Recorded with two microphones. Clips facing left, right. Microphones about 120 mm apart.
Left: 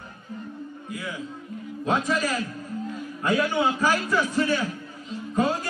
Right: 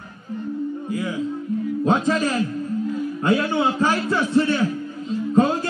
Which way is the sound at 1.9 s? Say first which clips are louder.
Right 4 dB; 30° right (ahead or behind).